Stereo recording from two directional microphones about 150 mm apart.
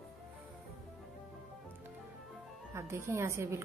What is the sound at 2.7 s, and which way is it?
Speech, 20° right (ahead or behind).